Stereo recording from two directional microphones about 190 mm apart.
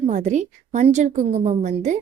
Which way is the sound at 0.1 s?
40° right (ahead or behind).